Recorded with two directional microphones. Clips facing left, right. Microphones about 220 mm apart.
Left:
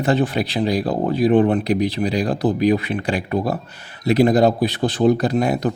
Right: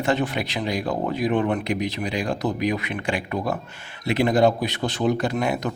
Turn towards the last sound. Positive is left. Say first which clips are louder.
# left 5 dB
turn(degrees=35)  # may be behind; listen again after turning